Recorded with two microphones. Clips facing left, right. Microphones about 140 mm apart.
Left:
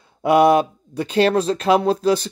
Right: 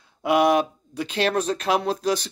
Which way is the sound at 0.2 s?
35° left (ahead or behind).